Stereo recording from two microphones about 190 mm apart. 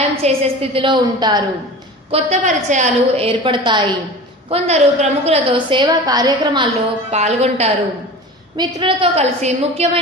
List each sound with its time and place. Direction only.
0.2 s a woman's voice: 35° right (ahead or behind)
2.0 s a woman's voice: 35° right (ahead or behind)
7.1 s a woman's voice: 35° right (ahead or behind)